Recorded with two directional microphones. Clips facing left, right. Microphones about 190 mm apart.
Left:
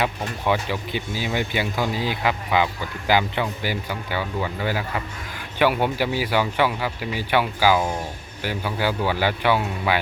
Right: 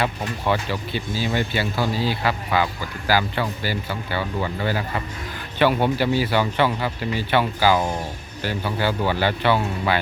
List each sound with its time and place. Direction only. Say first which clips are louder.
0.0 s speech: even; 10° left (ahead or behind)